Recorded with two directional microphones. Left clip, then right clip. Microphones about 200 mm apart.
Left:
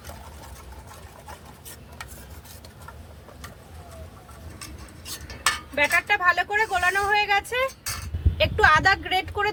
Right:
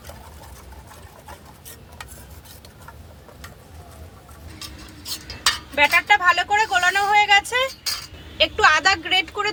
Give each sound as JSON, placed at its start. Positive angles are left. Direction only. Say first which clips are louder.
{"t": 5.7, "sound": "speech", "louder": "right 6 dB", "side_deg": 20}